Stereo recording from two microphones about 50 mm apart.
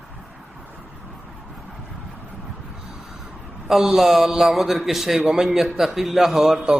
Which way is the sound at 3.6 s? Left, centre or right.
Centre.